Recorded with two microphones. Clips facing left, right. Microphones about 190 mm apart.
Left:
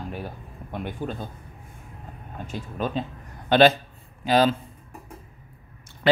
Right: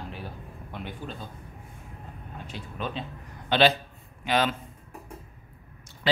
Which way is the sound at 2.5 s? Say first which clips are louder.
Left 6 dB; 45° left (ahead or behind).